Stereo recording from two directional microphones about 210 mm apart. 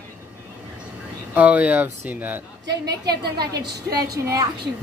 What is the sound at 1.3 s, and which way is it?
Speech, 5° right (ahead or behind).